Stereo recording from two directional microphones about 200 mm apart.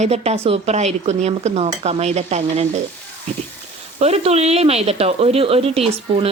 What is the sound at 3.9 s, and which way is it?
Speech, 30° right (ahead or behind).